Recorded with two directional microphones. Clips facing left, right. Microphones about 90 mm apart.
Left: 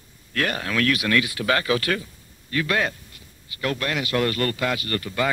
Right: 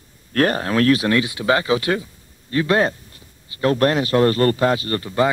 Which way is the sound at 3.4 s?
30° right (ahead or behind).